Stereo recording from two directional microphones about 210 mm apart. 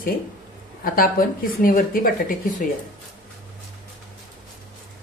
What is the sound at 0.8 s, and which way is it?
Speech, 40° left (ahead or behind).